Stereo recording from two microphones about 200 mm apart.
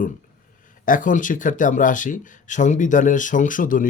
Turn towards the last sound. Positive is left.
turn(degrees=40)  # may be behind; listen again after turning